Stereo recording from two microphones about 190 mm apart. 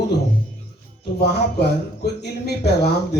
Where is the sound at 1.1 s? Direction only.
60° left (ahead or behind).